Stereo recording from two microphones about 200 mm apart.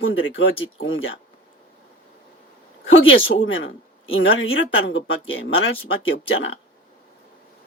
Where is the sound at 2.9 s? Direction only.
80° left.